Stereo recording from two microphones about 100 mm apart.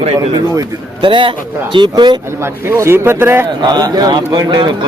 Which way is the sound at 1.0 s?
55° right (ahead or behind).